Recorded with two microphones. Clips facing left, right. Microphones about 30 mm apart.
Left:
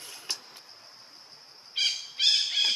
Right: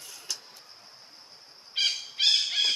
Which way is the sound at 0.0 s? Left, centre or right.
Left.